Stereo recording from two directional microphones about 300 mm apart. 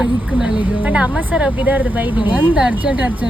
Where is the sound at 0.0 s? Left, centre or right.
Centre.